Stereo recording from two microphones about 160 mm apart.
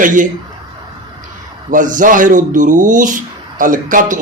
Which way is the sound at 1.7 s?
55° right (ahead or behind).